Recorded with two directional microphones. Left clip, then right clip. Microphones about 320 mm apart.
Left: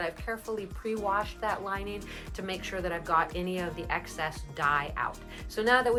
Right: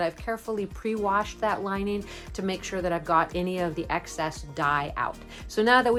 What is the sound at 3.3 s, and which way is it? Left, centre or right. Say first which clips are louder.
Speech: right 5 dB; right.